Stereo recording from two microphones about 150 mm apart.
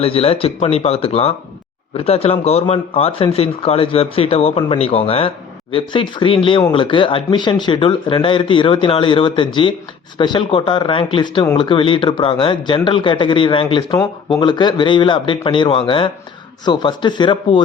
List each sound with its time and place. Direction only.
0.0 s a man's voice: 40° left (ahead or behind)